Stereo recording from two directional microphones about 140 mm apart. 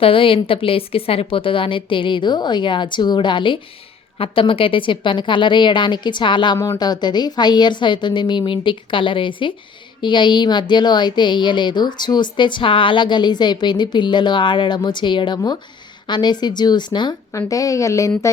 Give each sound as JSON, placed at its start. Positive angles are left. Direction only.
{"t": 0.0, "sound": "speech", "side_deg": 40}